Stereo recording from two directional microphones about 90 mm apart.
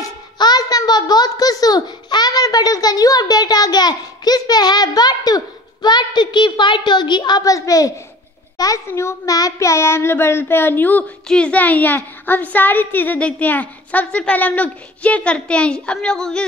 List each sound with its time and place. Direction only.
0.4 s babbling: 45° left (ahead or behind)
8.5 s a child's voice: 40° left (ahead or behind); by 16.4 s 5° left (ahead or behind)